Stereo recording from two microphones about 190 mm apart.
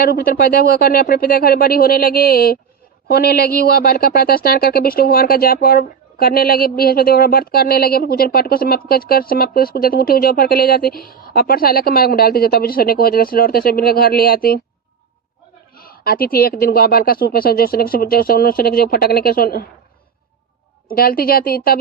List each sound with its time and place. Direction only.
0.0 s speech: 50° left (ahead or behind)
15.7 s speech: 50° left (ahead or behind)
20.8 s speech: 50° left (ahead or behind)